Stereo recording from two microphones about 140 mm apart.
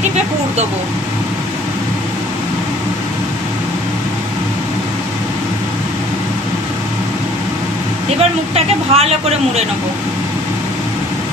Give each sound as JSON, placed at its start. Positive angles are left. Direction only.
{"t": 8.2, "sound": "speech", "side_deg": -45}